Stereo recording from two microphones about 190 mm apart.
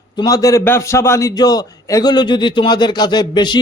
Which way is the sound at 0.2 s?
20° left (ahead or behind).